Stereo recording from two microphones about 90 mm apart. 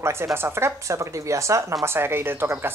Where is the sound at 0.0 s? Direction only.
25° right (ahead or behind).